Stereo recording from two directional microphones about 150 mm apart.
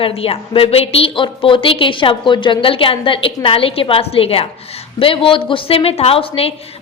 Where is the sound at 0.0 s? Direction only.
40° left (ahead or behind).